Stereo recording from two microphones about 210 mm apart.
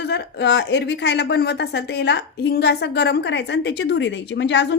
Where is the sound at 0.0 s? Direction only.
50° left (ahead or behind).